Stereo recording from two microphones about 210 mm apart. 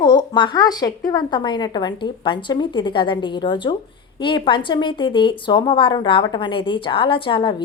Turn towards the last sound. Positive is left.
turn(degrees=25)  # may be behind; listen again after turning